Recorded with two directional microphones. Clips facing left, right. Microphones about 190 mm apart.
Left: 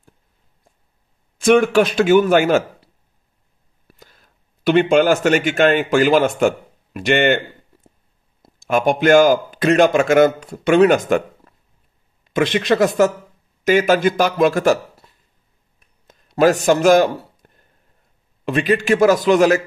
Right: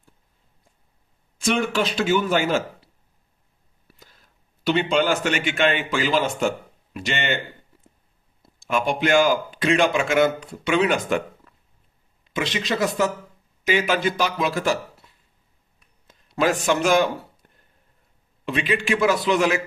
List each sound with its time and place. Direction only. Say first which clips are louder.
1.4 s a man's voice: left 9 dB; 55° left (ahead or behind)
4.6 s a man's voice: left 7 dB; 50° left (ahead or behind)
8.4 s a man's voice: left 5 dB; 45° left (ahead or behind)
16.1 s a man's voice: left 7 dB; 45° left (ahead or behind)